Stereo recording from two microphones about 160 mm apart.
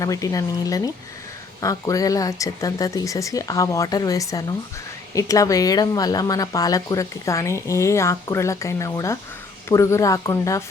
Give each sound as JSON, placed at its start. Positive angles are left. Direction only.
{"t": 0.0, "sound": "speech", "side_deg": 20}